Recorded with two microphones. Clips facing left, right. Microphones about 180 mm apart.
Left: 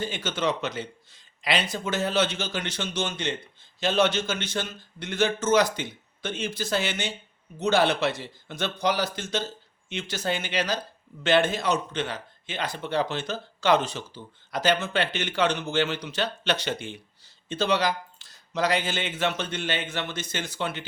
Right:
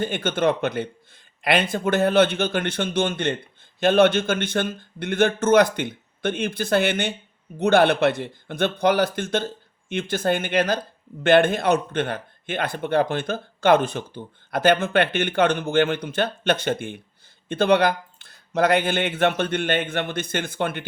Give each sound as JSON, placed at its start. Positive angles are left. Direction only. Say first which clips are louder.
{"t": 0.0, "sound": "a man's voice", "louder": "right 6 dB", "side_deg": -55}